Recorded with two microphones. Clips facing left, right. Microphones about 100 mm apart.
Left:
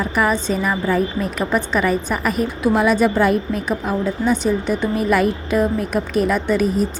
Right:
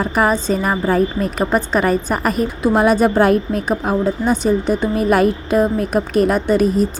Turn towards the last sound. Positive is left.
turn(degrees=-40)  # may be behind; listen again after turning